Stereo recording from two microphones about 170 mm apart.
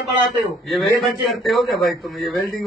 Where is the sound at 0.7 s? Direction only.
Centre (ahead or behind).